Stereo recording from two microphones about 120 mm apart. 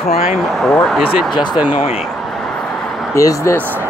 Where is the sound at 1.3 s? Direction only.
40° left (ahead or behind).